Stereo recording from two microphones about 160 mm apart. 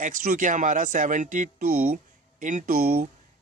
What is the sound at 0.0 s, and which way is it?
Speech, 55° right (ahead or behind).